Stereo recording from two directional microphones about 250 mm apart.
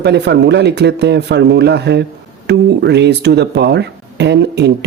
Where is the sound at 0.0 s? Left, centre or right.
Right.